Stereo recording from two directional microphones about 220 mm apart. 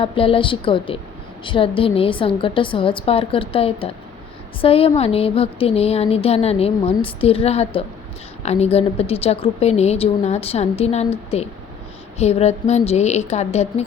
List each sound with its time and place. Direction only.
0.0 s a woman's voice: 25° left (ahead or behind)